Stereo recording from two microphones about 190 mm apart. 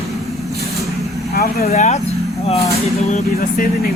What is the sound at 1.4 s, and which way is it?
Speech, 55° left (ahead or behind).